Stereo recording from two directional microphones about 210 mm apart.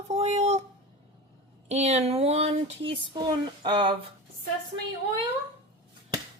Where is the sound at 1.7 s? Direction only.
30° right (ahead or behind).